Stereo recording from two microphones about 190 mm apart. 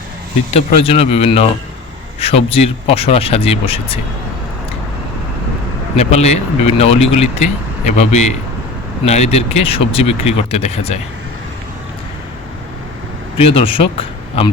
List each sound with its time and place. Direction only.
0.5 s speech: 35° left (ahead or behind)
6.0 s speech: 35° left (ahead or behind)
13.3 s speech: 30° left (ahead or behind)